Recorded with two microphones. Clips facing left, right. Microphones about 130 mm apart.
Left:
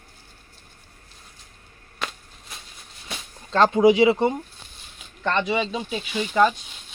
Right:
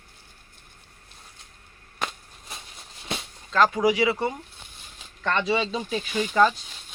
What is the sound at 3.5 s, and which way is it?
Speech, 30° left (ahead or behind).